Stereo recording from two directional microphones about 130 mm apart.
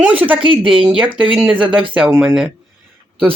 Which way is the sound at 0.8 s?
5° right (ahead or behind).